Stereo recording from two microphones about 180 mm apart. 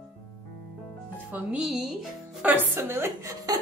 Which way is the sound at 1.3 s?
5° right (ahead or behind).